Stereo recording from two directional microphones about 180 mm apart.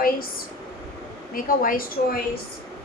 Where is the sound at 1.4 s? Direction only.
50° left (ahead or behind).